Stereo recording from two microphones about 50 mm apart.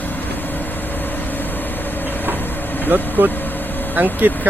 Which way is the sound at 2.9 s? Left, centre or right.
Right.